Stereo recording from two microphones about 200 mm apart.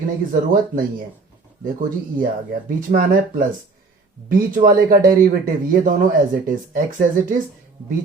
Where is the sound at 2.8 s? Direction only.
45° right (ahead or behind).